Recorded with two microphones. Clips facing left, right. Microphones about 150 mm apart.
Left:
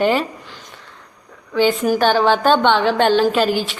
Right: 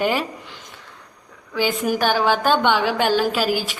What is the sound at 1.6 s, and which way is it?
A woman's voice, 10° right (ahead or behind).